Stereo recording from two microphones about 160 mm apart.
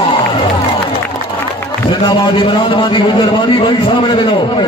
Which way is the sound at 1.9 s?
30° left (ahead or behind).